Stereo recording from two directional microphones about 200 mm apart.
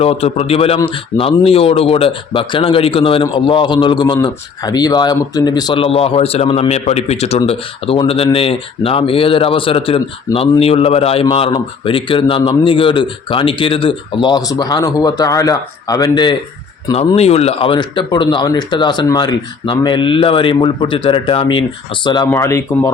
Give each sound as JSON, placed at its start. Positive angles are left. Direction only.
{"t": 0.0, "sound": "speech", "side_deg": 30}